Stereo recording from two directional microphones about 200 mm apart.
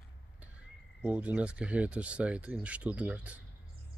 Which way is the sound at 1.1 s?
5° right (ahead or behind).